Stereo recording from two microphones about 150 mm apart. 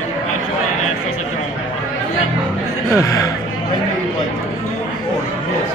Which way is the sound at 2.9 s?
20° left (ahead or behind).